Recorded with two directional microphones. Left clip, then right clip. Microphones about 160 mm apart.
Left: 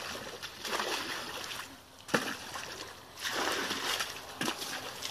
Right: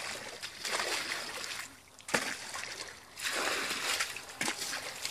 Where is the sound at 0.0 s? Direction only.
45° left (ahead or behind).